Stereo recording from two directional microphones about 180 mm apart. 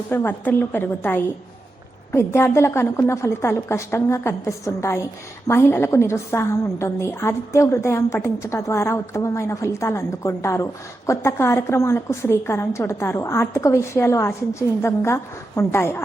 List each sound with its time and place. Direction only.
0.1 s a woman's voice: 10° left (ahead or behind)